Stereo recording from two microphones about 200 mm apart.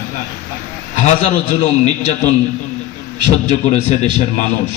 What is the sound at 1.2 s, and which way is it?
A man's voice, 30° left (ahead or behind).